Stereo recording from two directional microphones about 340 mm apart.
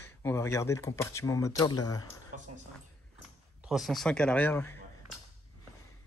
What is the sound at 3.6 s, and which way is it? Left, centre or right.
A man's voice, centre.